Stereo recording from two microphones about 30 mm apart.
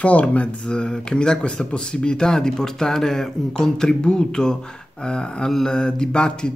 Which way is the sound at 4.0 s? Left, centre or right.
Left.